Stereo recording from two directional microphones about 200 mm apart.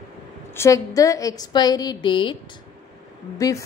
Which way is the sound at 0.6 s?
15° left (ahead or behind).